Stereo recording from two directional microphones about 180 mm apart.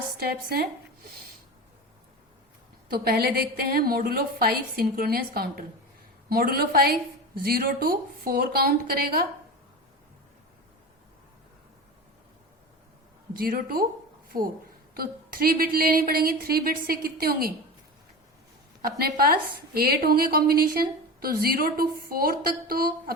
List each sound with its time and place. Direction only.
0.2 s a woman's voice: 60° right (ahead or behind)
2.9 s a woman's voice: 55° right (ahead or behind)
13.3 s speech: 55° right (ahead or behind)
14.9 s a woman's voice: 55° right (ahead or behind)
18.8 s a woman's voice: 55° right (ahead or behind)